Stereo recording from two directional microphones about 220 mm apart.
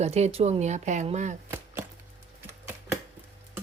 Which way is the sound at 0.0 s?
30° right (ahead or behind).